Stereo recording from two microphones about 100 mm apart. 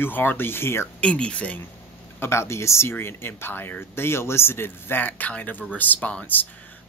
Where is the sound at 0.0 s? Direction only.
20° left (ahead or behind).